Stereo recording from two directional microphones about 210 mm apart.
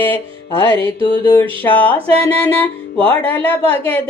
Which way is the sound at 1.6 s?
10° left (ahead or behind).